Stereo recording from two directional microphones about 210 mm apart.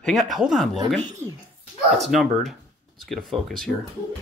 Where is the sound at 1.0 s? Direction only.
15° right (ahead or behind).